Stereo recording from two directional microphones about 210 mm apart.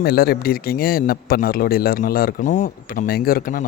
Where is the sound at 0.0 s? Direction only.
45° left (ahead or behind).